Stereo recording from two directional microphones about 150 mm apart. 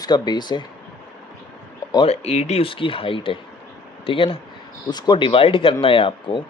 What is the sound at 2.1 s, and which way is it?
Speech, 45° left (ahead or behind).